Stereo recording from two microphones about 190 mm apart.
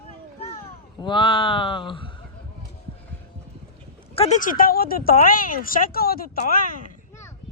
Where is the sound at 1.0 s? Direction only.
25° left (ahead or behind).